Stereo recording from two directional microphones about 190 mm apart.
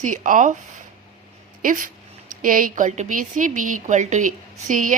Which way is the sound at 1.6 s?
45° right (ahead or behind).